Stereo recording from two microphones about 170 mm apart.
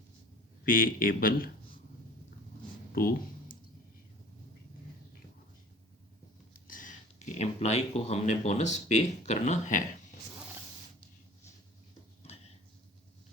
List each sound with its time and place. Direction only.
0.6 s speech: 55° left (ahead or behind)
2.9 s a sound: 60° left (ahead or behind)
6.5 s speech: 55° left (ahead or behind)